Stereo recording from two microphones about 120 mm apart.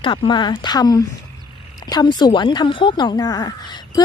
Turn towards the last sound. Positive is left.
turn(degrees=35)  # may be behind; listen again after turning